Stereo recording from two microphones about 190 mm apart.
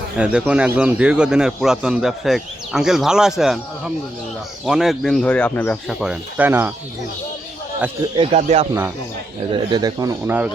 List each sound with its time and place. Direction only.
0.2 s a man's voice: 5° right (ahead or behind)
6.0 s speech: 5° right (ahead or behind)
8.1 s speech: 30° right (ahead or behind)
9.5 s speech: 25° right (ahead or behind)